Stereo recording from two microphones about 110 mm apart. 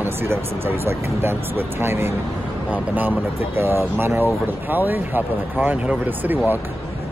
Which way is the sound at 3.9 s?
20° right (ahead or behind).